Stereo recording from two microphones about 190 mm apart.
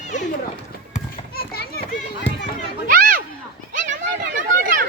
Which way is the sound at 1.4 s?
55° left (ahead or behind).